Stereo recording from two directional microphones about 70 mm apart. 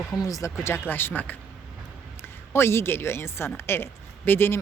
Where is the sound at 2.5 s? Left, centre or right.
Left.